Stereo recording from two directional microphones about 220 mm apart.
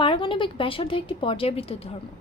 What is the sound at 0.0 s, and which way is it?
A woman's voice, 25° left (ahead or behind).